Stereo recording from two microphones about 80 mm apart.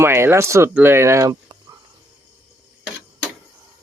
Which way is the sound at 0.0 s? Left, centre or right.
Right.